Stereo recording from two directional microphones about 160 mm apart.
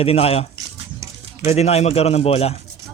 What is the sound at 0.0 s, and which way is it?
Speech, 40° left (ahead or behind).